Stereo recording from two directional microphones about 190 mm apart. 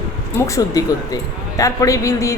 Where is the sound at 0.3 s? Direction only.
15° left (ahead or behind).